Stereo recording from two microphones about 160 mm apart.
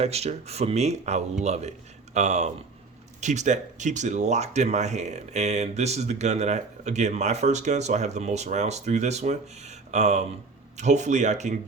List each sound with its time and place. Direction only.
0.0 s speech: 40° right (ahead or behind)